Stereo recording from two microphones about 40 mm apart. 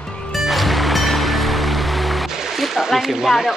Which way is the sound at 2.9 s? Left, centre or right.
Centre.